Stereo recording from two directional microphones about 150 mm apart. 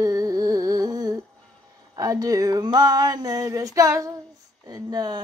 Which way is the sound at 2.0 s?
25° right (ahead or behind).